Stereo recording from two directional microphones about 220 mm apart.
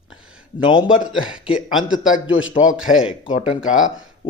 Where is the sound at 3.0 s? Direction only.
25° left (ahead or behind).